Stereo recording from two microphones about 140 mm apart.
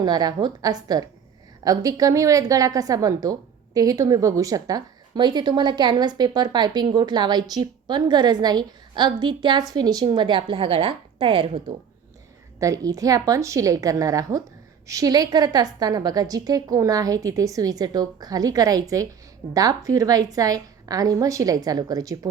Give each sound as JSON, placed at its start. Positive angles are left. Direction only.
{"t": 0.0, "sound": "a woman's voice", "side_deg": -30}
{"t": 12.5, "sound": "a woman's voice", "side_deg": -25}